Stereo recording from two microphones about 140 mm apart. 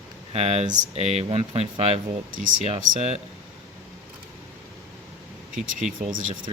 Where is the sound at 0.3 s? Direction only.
50° right (ahead or behind).